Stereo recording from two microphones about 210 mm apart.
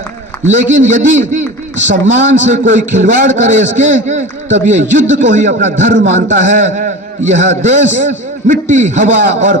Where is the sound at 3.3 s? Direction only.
35° right (ahead or behind).